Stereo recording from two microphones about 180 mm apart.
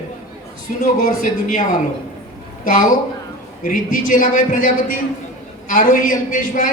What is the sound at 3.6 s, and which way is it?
A man's voice, 50° left (ahead or behind).